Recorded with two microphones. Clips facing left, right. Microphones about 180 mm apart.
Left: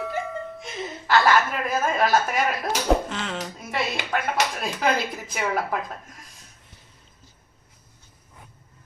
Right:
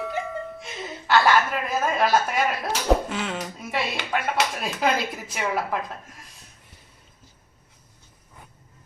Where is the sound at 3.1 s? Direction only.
5° right (ahead or behind).